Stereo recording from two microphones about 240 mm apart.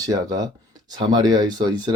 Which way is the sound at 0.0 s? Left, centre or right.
Centre.